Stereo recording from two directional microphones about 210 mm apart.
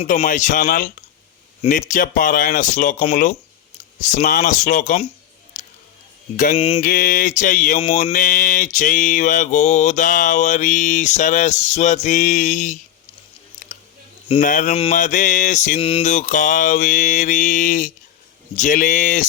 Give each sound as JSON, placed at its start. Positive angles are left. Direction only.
{"t": 0.0, "sound": "mantra", "side_deg": 35}
{"t": 6.3, "sound": "mantra", "side_deg": 40}
{"t": 8.1, "sound": "mantra", "side_deg": 40}
{"t": 14.4, "sound": "mantra", "side_deg": 40}